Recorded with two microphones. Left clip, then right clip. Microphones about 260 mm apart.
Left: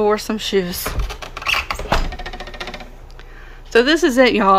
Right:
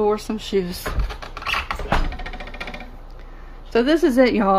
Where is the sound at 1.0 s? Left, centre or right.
Left.